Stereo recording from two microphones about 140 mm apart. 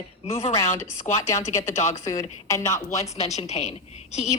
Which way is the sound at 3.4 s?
50° left (ahead or behind).